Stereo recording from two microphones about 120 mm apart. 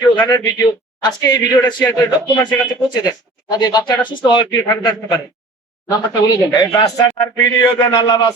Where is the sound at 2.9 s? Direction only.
35° left (ahead or behind).